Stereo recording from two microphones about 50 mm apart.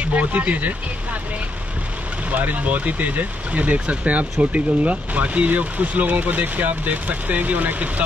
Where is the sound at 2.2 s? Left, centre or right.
Right.